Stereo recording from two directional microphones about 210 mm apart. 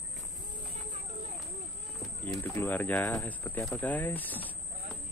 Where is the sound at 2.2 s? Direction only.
10° left (ahead or behind).